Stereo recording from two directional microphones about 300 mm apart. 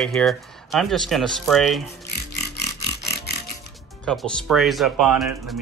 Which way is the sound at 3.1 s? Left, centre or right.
Left.